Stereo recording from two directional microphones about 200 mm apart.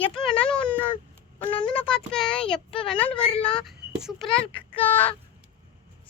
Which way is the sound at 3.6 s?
Centre (ahead or behind).